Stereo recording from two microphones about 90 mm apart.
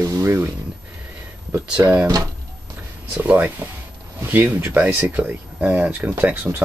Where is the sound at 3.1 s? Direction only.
20° right (ahead or behind).